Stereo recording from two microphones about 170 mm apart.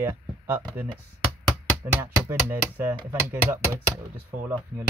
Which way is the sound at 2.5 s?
10° right (ahead or behind).